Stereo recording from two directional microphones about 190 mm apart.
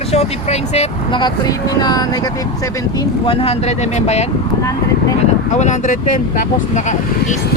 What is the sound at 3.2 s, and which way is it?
Speech, 30° left (ahead or behind).